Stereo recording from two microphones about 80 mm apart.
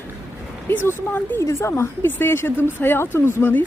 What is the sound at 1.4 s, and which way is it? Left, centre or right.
A woman's voice, left.